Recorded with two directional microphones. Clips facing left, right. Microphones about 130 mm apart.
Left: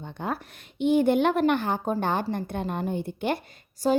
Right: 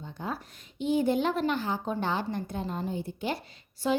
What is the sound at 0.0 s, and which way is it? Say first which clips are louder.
A woman's voice: left 4 dB; 65° left (ahead or behind).